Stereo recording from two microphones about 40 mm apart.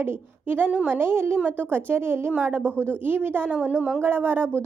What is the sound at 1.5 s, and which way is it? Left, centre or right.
Speech, right.